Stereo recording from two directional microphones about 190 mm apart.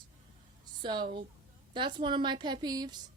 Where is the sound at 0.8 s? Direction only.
25° right (ahead or behind).